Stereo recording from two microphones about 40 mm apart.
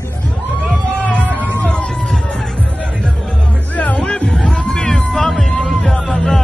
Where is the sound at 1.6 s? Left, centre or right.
Left.